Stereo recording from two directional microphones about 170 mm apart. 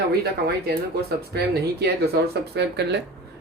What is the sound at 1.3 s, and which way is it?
Speech, 75° right (ahead or behind).